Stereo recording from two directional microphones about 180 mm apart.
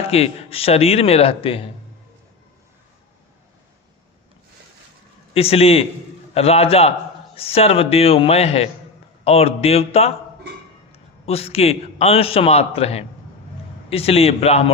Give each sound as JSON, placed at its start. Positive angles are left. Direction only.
{"t": 0.1, "sound": "a man's voice", "side_deg": 35}
{"t": 5.3, "sound": "a man's voice", "side_deg": 35}
{"t": 11.3, "sound": "a man's voice", "side_deg": 35}